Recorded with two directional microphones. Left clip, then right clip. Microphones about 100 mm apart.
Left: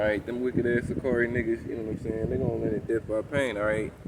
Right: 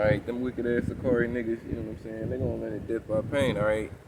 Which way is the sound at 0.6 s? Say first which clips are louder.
Even; 20° right (ahead or behind).